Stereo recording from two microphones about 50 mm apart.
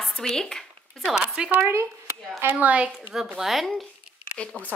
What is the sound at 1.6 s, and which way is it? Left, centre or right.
Speech, right.